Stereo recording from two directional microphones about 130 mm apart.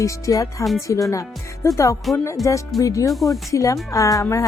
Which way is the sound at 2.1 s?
Centre (ahead or behind).